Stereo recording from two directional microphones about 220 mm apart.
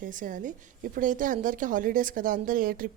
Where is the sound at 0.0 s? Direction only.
35° right (ahead or behind).